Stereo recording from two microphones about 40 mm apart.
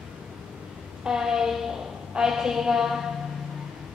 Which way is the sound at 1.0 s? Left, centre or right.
Centre.